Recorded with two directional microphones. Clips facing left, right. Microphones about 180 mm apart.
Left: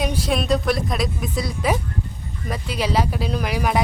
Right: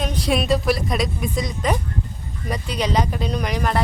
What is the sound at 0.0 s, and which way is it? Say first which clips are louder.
Speech: right 1 dB; 5° left (ahead or behind).